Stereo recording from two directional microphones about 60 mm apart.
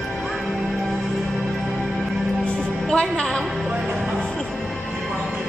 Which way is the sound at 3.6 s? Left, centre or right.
Centre.